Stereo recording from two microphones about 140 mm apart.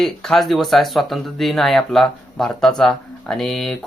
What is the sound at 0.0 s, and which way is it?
Speech, 5° left (ahead or behind).